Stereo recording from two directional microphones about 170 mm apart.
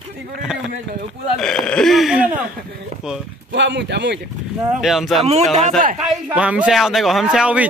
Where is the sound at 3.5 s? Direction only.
90° right.